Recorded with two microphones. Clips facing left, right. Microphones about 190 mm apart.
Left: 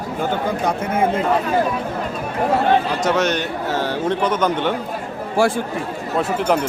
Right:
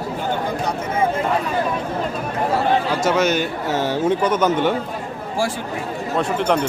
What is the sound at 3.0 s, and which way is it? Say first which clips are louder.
A man's voice: right 1 dB; centre (ahead or behind).